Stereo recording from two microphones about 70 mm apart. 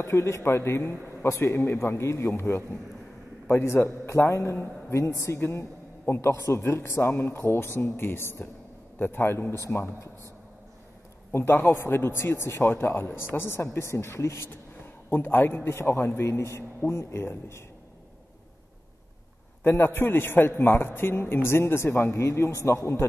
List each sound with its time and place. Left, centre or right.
0.0 s a man's voice: left
11.3 s a man's voice: left
15.0 s a man's voice: left
19.6 s a man's voice: left